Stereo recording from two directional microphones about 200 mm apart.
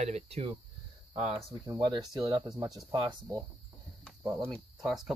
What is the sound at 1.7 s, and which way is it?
Speech, 20° right (ahead or behind).